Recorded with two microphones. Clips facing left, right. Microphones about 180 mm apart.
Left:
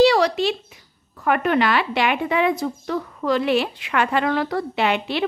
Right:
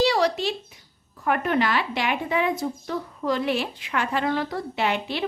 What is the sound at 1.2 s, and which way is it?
Speech, 85° left.